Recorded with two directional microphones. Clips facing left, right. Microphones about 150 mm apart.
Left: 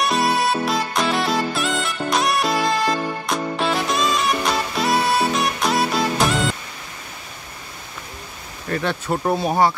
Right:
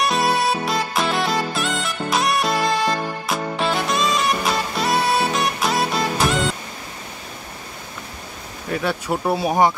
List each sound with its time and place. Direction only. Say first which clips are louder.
0.0 s music: even; centre (ahead or behind)
8.6 s speech: even; 5° right (ahead or behind)